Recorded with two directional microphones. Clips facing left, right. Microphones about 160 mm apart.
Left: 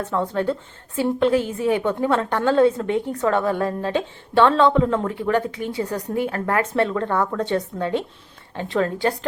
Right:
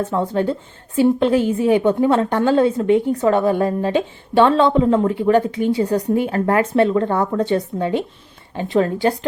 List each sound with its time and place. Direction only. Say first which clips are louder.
0.1 s a woman's voice: right 3 dB; 15° right (ahead or behind)